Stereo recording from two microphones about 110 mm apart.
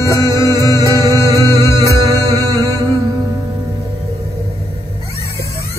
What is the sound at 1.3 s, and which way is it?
Music, 30° left (ahead or behind).